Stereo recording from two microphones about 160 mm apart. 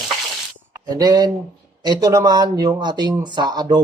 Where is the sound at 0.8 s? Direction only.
25° right (ahead or behind).